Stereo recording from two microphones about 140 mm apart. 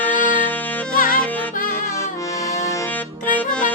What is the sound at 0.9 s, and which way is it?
Music, 80° left.